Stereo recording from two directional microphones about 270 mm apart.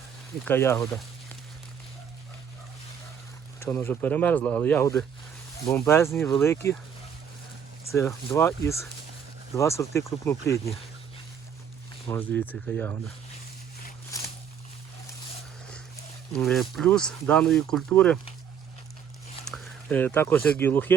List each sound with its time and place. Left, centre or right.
0.4 s speech: centre
3.6 s speech: centre
7.9 s speech: centre
12.0 s speech: centre
14.1 s a sound: centre
16.3 s speech: centre
19.5 s speech: centre